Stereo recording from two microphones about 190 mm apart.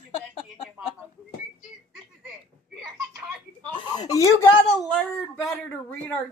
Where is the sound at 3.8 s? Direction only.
20° left (ahead or behind).